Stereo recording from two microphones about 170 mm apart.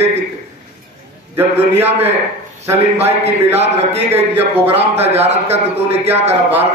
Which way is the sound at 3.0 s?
40° right (ahead or behind).